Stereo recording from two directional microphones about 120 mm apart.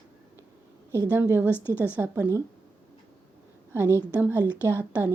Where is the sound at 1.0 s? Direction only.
15° right (ahead or behind).